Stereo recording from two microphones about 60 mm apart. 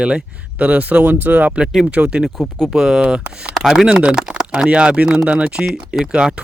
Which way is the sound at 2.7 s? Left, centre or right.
Centre.